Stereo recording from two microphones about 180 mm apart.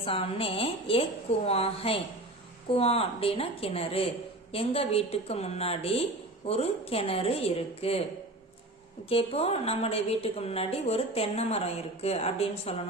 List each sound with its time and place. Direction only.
0.0 s a woman's voice: 30° left (ahead or behind)
9.0 s a woman's voice: 35° left (ahead or behind)